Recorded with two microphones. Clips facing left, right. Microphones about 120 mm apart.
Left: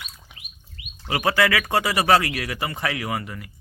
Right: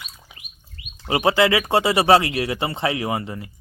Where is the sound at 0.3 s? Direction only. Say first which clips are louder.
Right 1 dB; centre (ahead or behind).